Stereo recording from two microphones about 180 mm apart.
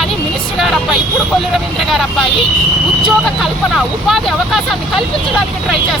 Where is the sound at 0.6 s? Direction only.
Centre (ahead or behind).